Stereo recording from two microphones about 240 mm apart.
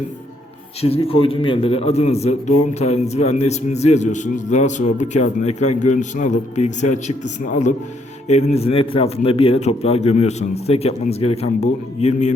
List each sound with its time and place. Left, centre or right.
0.8 s a man's voice: left